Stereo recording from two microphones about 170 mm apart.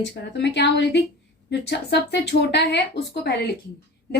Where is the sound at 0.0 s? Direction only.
90° left.